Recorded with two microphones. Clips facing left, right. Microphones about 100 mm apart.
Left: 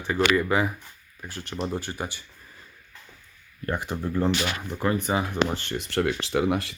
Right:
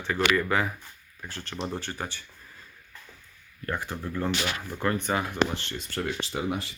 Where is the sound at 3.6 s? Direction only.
20° left (ahead or behind).